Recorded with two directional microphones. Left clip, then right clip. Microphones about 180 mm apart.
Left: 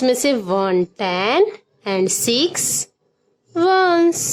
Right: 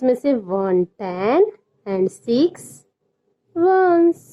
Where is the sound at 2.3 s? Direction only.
10° left (ahead or behind).